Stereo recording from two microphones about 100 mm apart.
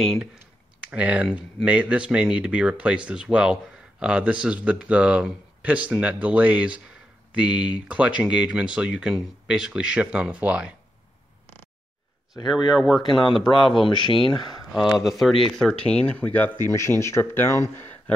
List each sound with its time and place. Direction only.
0.0 s speech: centre (ahead or behind)
0.8 s speech: 10° right (ahead or behind)
12.7 s speech: 5° right (ahead or behind)
13.8 s speech: 55° left (ahead or behind)
14.7 s speech: centre (ahead or behind); by 16.5 s 15° left (ahead or behind)
16.6 s speech: 25° left (ahead or behind)